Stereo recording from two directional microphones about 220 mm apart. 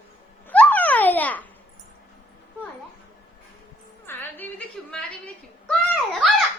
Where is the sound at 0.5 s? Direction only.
5° left (ahead or behind).